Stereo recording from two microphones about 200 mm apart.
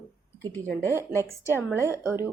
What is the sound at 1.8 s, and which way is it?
Speech, 15° right (ahead or behind).